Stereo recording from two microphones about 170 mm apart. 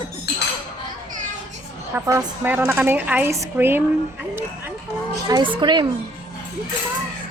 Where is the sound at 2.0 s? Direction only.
15° right (ahead or behind).